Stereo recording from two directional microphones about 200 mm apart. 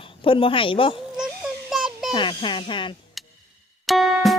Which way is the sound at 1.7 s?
Centre (ahead or behind).